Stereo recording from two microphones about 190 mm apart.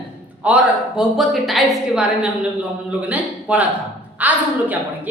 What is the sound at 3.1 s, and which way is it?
A woman's voice, 5° right (ahead or behind).